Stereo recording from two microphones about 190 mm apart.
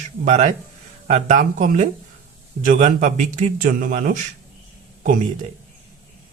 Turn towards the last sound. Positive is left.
turn(degrees=-40)  # may be behind; listen again after turning